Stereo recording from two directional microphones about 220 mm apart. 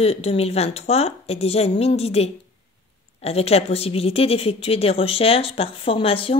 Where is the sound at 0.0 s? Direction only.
25° left (ahead or behind).